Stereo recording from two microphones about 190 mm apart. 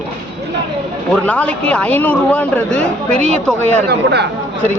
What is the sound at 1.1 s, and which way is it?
A man's voice, 5° left (ahead or behind).